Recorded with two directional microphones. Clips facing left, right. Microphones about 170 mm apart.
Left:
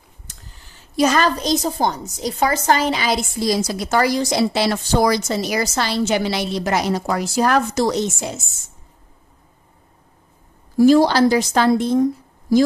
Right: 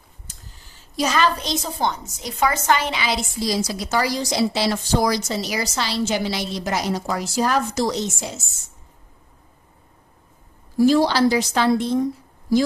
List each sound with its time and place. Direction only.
0.9 s a woman's voice: 50° left (ahead or behind)
10.8 s a woman's voice: 50° left (ahead or behind)